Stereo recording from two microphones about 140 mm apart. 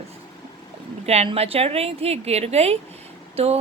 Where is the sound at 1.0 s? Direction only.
45° right (ahead or behind).